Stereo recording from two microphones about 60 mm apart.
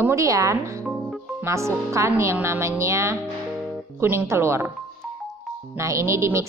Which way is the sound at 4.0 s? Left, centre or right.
Right.